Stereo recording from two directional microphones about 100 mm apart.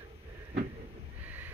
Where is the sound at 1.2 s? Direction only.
20° right (ahead or behind).